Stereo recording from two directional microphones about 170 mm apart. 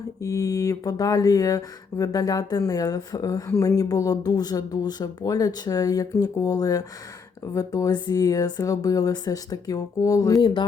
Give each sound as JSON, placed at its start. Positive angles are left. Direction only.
{"t": 0.2, "sound": "speech", "side_deg": 20}